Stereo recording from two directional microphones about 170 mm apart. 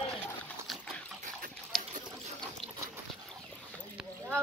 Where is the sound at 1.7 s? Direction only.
Centre (ahead or behind).